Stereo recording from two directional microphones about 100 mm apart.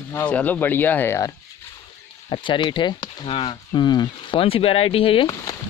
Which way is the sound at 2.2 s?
55° left (ahead or behind).